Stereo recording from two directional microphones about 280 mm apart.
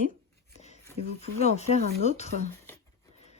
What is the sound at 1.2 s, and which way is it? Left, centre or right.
Speech, left.